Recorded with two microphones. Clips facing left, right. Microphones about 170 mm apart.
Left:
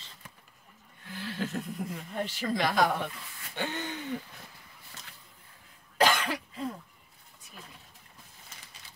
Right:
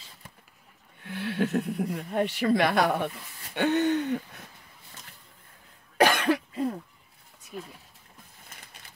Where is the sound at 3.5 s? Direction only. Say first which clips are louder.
Right 12 dB; 65° right (ahead or behind).